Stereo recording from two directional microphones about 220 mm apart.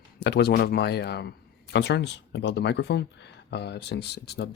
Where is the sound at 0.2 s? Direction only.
50° left (ahead or behind).